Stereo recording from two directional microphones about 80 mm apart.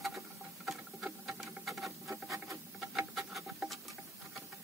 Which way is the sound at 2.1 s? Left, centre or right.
Right.